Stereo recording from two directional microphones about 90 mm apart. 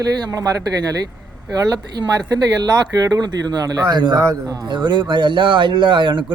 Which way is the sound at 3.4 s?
45° right (ahead or behind).